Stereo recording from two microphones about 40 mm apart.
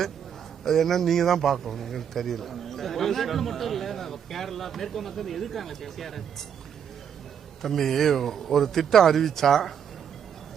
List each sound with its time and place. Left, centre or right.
0.6 s speech: centre
7.6 s speech: centre